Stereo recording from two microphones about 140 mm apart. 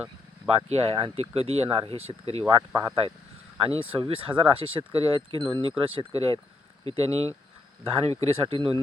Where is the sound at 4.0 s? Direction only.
40° right (ahead or behind).